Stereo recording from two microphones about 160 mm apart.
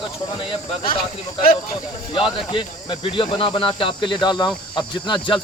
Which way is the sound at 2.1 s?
35° left (ahead or behind).